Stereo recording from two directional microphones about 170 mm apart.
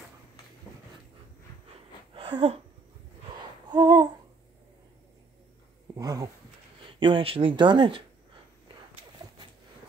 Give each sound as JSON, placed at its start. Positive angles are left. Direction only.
{"t": 2.1, "sound": "a sound", "side_deg": -30}
{"t": 3.6, "sound": "humming", "side_deg": -25}
{"t": 5.9, "sound": "speech", "side_deg": -20}